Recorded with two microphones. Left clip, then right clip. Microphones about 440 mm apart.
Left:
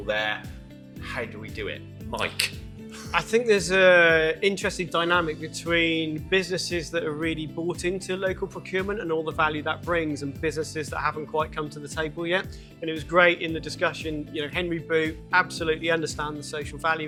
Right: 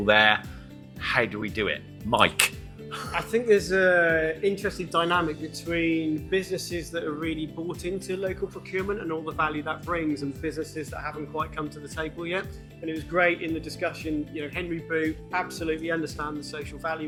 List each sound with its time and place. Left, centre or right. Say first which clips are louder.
0.0 s speech: right 7 dB; right
3.1 s speech: left 1 dB; left
4.9 s speech: left 1 dB; centre
5.7 s speech: left 3 dB; left
6.3 s speech: left 6 dB; left
7.9 s speech: left 2 dB; left
8.7 s speech: left 3 dB; left
12.8 s speech: left 4 dB; left
14.3 s speech: left 4 dB; left
15.3 s speech: left 6 dB; left
15.8 s speech: left 4 dB; left